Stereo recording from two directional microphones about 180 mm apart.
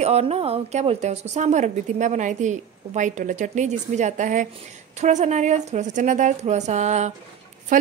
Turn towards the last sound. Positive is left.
turn(degrees=-45)  # may be behind; listen again after turning